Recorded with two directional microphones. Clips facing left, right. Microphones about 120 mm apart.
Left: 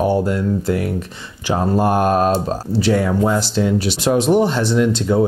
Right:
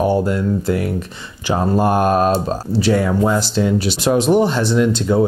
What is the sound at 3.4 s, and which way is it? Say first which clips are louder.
Speech: even; 10° right (ahead or behind).